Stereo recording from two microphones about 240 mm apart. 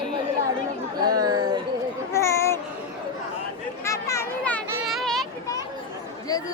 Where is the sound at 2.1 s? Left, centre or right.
Centre.